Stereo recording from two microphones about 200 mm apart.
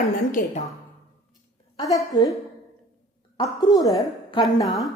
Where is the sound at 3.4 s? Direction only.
20° left (ahead or behind).